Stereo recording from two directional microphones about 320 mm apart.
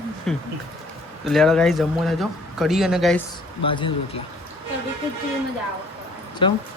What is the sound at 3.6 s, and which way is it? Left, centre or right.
Speech, centre.